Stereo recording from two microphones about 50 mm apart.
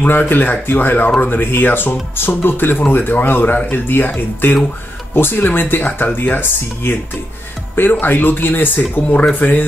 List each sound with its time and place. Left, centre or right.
0.3 s speech: left